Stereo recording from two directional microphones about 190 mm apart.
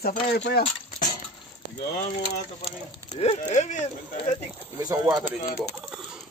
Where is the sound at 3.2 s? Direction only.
35° left (ahead or behind).